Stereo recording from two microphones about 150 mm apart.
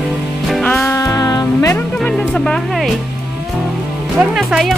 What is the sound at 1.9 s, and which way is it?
Music, 5° left (ahead or behind).